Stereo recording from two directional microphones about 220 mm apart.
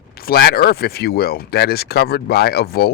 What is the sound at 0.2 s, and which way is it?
Speech, 45° left (ahead or behind).